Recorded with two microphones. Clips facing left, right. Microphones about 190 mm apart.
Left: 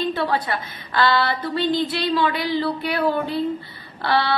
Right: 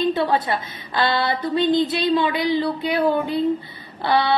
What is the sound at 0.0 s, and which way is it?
A woman's voice, 20° right (ahead or behind).